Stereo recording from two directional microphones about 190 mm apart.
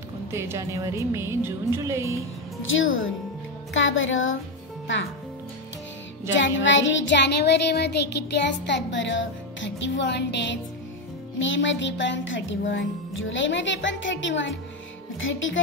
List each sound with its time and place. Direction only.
0.3 s speech: 15° right (ahead or behind)
2.7 s music: 90° left
6.3 s child singing: 75° left (ahead or behind)
11.3 s child singing: 80° left
15.1 s speech: 90° left